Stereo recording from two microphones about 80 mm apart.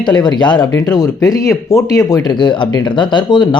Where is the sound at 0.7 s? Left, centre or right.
Left.